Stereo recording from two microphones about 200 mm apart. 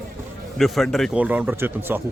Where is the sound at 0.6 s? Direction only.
Centre (ahead or behind).